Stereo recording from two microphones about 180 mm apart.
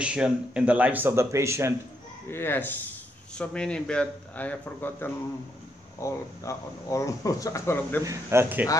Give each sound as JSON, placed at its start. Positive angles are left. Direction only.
{"t": 0.0, "sound": "speech", "side_deg": -5}
{"t": 2.3, "sound": "a man's voice", "side_deg": 10}
{"t": 8.0, "sound": "speech", "side_deg": -15}